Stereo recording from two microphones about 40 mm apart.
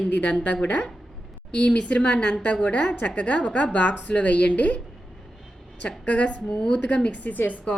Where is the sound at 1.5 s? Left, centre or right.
Left.